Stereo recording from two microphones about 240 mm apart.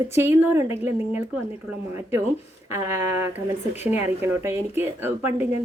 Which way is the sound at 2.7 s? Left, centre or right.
Centre.